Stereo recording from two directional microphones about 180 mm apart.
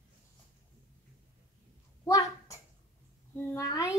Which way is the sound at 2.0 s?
15° left (ahead or behind).